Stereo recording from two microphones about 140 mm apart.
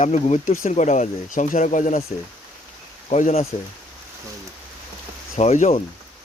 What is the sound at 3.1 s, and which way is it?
Speech, 60° left (ahead or behind).